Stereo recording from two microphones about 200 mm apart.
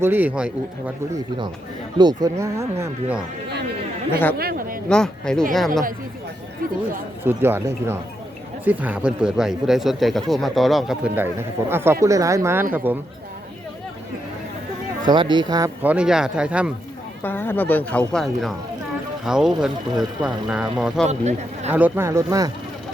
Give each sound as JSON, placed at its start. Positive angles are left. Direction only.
{"t": 0.0, "sound": "speech", "side_deg": -10}
{"t": 2.0, "sound": "speech", "side_deg": -20}
{"t": 4.1, "sound": "speech", "side_deg": 10}
{"t": 4.4, "sound": "a sound", "side_deg": -45}
{"t": 4.9, "sound": "speech", "side_deg": 5}
{"t": 7.3, "sound": "speech", "side_deg": -10}
{"t": 15.0, "sound": "speech", "side_deg": -20}
{"t": 15.8, "sound": "speech", "side_deg": -5}
{"t": 17.2, "sound": "speech", "side_deg": 10}
{"t": 21.1, "sound": "speech", "side_deg": -35}
{"t": 21.7, "sound": "speech", "side_deg": -10}